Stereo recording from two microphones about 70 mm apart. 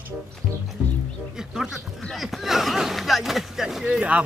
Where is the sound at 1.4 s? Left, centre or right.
Centre.